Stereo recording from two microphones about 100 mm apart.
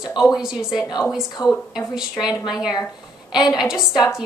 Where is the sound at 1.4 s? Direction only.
40° left (ahead or behind).